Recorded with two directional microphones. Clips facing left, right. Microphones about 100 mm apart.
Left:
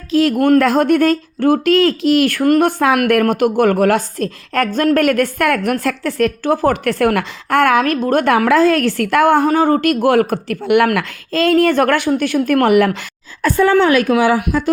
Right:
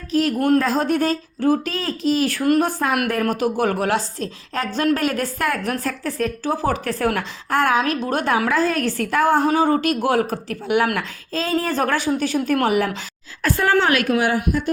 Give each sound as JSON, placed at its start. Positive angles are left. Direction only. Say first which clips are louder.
{"t": 0.1, "sound": "speech", "louder": "left 6 dB", "side_deg": 90}